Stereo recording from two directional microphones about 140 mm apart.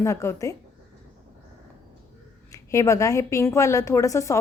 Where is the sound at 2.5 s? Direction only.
20° left (ahead or behind).